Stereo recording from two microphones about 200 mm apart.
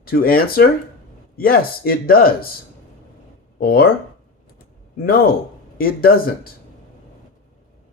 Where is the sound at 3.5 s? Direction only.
50° left (ahead or behind).